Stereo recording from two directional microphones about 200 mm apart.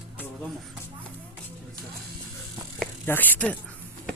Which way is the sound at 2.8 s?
10° left (ahead or behind).